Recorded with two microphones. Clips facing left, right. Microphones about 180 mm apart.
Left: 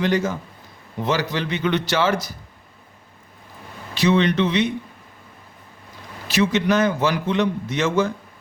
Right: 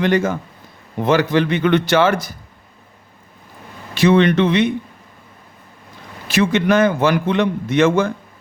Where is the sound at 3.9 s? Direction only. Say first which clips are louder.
Right 5 dB; 55° right (ahead or behind).